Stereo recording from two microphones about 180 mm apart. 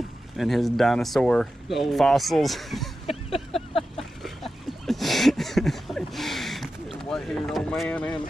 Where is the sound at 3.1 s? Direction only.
35° left (ahead or behind).